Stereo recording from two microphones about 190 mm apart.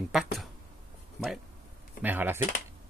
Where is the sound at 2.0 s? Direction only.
10° right (ahead or behind).